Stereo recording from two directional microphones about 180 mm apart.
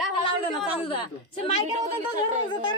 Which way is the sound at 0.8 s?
30° left (ahead or behind).